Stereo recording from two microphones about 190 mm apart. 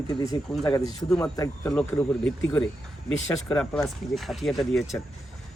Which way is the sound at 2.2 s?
5° left (ahead or behind).